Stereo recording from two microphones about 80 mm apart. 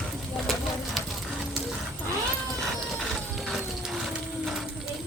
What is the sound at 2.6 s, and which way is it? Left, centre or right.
Ratchet, centre.